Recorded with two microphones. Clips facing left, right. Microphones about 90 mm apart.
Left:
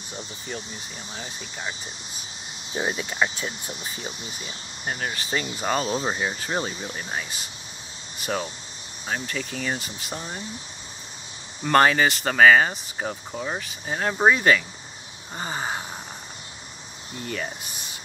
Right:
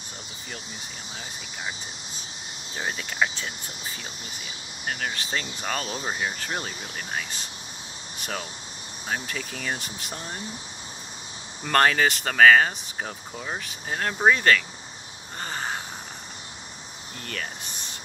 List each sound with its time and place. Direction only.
1.1 s speech: centre (ahead or behind)
2.7 s speech: 15° left (ahead or behind)
4.8 s speech: 15° left (ahead or behind)
5.1 s speech: 5° left (ahead or behind)
11.6 s speech: 5° left (ahead or behind)
17.2 s speech: 10° left (ahead or behind)